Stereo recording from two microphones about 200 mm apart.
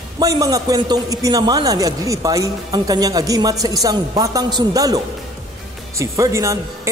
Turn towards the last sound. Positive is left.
turn(degrees=-15)  # may be behind; listen again after turning